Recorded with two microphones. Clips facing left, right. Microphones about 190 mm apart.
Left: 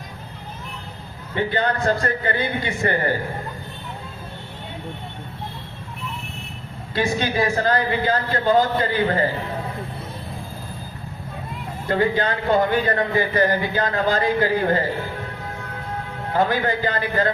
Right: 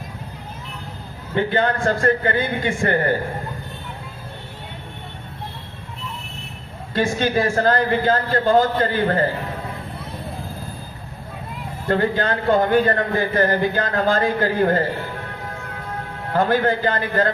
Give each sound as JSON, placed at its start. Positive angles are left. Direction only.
{"t": 1.5, "sound": "a man's voice", "side_deg": -50}
{"t": 6.9, "sound": "a man's voice", "side_deg": -50}
{"t": 11.9, "sound": "a man's voice", "side_deg": -50}
{"t": 16.3, "sound": "a man's voice", "side_deg": -50}